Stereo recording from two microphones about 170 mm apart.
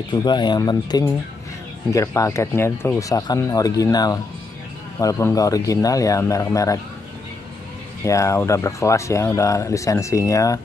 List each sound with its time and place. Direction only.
0.1 s speech: 25° left (ahead or behind)
8.0 s speech: 20° left (ahead or behind)